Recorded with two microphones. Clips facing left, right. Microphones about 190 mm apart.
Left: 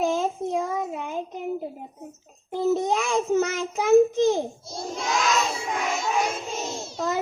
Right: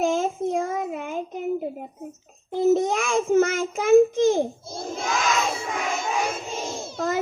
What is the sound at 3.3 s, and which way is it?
Child singing, 50° right (ahead or behind).